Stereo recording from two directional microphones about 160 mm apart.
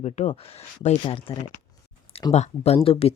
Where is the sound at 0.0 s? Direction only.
45° left (ahead or behind).